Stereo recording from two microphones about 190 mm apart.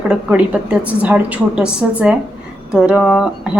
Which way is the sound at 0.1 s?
5° right (ahead or behind).